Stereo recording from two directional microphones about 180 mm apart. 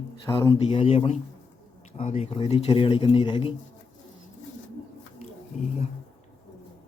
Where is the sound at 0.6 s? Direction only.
30° left (ahead or behind).